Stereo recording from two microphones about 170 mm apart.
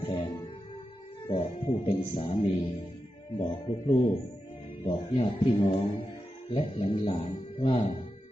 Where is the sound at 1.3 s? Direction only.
40° left (ahead or behind).